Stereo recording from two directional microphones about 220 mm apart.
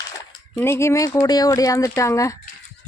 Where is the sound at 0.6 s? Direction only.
10° left (ahead or behind).